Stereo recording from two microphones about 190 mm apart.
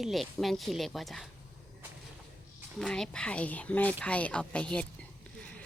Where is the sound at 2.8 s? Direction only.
5° left (ahead or behind).